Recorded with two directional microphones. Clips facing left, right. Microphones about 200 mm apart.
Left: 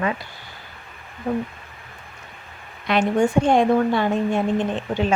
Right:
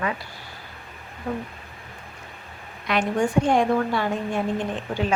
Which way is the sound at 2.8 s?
25° left (ahead or behind).